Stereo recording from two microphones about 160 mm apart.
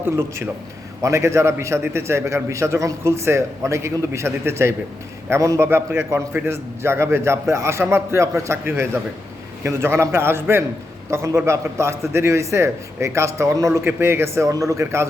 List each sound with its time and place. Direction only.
0.0 s a man's voice: 15° right (ahead or behind)